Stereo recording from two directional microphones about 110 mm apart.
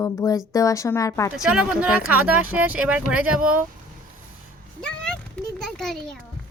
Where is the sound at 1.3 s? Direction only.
5° right (ahead or behind).